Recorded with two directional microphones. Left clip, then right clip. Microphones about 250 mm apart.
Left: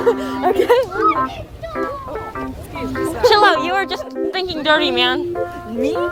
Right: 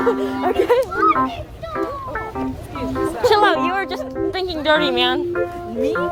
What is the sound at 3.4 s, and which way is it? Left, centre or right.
Speech, centre.